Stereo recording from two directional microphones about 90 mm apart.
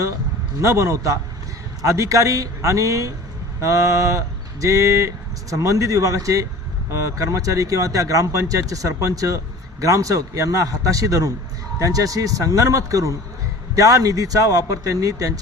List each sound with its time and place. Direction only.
0.6 s speech: 35° right (ahead or behind)